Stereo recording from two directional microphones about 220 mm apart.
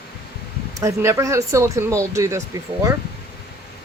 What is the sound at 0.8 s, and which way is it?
Speech, 15° right (ahead or behind).